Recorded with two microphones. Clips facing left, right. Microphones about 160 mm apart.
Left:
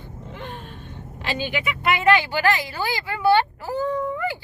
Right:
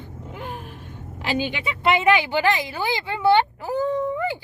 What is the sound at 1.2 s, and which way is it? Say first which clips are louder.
A woman's voice: right 1 dB; 15° right (ahead or behind).